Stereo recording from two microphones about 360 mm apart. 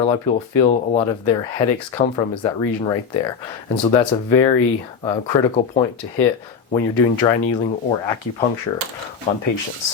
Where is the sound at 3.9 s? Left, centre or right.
Centre.